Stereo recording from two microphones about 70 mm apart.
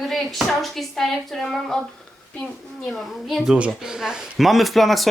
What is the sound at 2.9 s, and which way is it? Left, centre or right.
Speech, centre.